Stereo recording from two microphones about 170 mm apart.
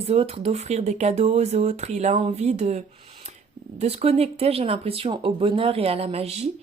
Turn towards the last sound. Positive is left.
turn(degrees=-35)  # may be behind; listen again after turning